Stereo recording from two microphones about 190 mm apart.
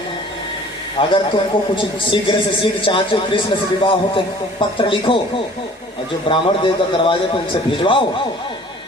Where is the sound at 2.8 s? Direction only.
25° left (ahead or behind).